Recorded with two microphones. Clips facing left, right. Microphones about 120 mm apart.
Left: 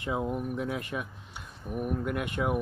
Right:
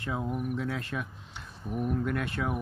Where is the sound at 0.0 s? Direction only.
15° left (ahead or behind).